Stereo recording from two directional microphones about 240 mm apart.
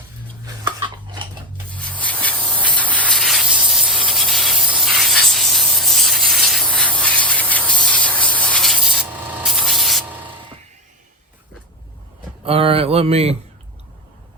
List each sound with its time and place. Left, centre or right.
0.4 s a sound: centre
1.7 s spray: centre
12.5 s mantra: right